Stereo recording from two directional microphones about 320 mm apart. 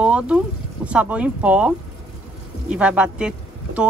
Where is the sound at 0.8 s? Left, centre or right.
Centre.